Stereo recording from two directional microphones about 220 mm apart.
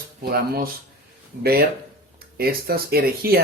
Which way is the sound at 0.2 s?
45° right (ahead or behind).